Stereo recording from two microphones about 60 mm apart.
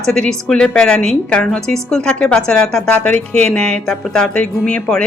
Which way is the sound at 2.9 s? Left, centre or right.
Left.